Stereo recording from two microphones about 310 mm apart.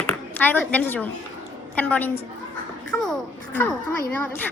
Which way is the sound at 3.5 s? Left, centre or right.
Centre.